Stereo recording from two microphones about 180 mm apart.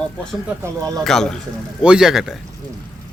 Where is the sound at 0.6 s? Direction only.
20° right (ahead or behind).